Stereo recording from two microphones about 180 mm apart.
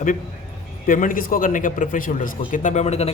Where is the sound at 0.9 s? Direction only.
50° left (ahead or behind).